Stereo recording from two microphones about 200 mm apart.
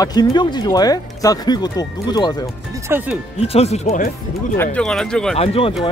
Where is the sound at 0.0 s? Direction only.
20° left (ahead or behind).